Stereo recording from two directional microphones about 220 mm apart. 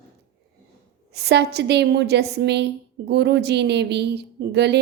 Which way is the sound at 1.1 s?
50° right (ahead or behind).